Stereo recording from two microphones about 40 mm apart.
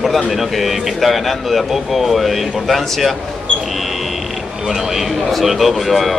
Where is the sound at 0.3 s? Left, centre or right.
Centre.